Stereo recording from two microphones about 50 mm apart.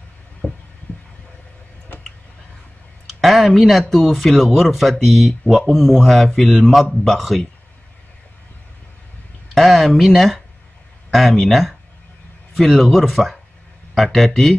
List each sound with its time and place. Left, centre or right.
0.4 s a sound: left
3.2 s speech: centre
9.5 s speech: centre